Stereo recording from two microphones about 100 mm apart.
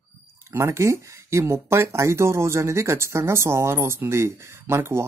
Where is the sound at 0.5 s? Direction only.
30° right (ahead or behind).